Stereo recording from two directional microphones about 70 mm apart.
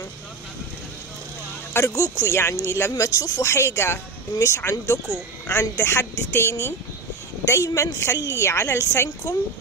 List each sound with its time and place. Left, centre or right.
1.9 s a woman's voice: left
3.4 s a woman's voice: left